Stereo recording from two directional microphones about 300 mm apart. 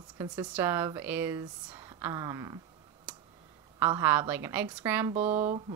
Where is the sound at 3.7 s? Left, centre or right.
Centre.